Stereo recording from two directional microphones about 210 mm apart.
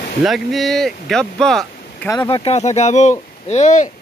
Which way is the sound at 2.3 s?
25° left (ahead or behind).